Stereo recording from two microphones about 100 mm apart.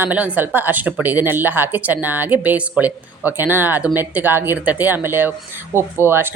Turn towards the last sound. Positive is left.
turn(degrees=-20)  # may be behind; listen again after turning